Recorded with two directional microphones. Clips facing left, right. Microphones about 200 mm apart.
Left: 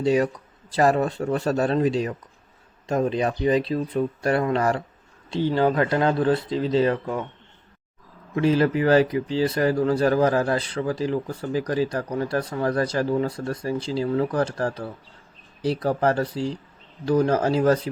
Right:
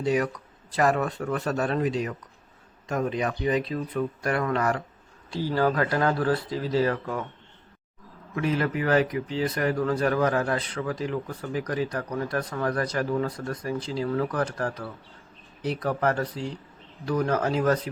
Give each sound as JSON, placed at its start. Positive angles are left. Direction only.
{"t": 0.0, "sound": "speech", "side_deg": 30}
{"t": 8.4, "sound": "speech", "side_deg": 30}